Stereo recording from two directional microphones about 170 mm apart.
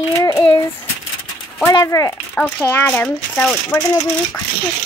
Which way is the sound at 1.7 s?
20° left (ahead or behind).